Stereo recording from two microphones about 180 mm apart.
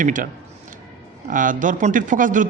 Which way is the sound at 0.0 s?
45° right (ahead or behind).